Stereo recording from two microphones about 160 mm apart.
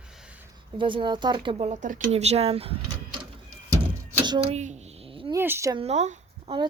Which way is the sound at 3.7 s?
25° right (ahead or behind).